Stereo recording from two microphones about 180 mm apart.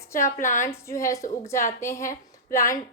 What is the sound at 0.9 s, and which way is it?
A woman's voice, 15° left (ahead or behind).